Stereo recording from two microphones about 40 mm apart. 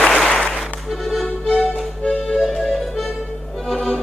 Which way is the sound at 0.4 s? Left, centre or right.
Centre.